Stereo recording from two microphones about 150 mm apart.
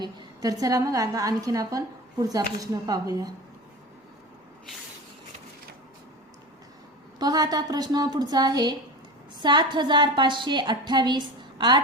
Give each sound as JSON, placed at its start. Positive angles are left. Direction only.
{"t": 0.0, "sound": "a woman's voice", "side_deg": -25}
{"t": 7.2, "sound": "a woman's voice", "side_deg": -25}